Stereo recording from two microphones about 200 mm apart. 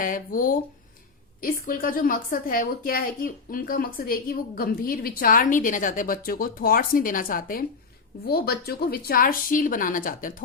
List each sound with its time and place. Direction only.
0.0 s a woman's voice: 45° left (ahead or behind)